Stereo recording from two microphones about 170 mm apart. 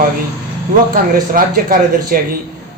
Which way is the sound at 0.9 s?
55° right (ahead or behind).